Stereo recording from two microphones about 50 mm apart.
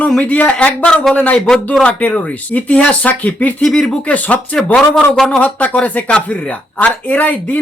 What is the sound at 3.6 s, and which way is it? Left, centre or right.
Speech, centre.